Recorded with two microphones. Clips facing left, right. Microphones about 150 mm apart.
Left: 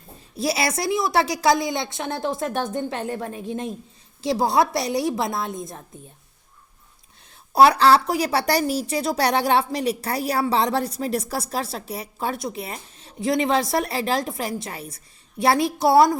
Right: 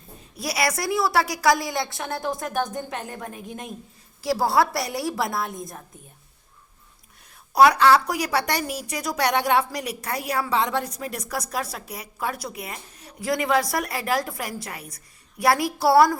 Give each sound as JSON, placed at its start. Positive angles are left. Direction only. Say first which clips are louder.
{"t": 0.3, "sound": "a woman's voice", "louder": "left 2 dB", "side_deg": 25}
{"t": 7.5, "sound": "a woman's voice", "louder": "left 1 dB", "side_deg": 30}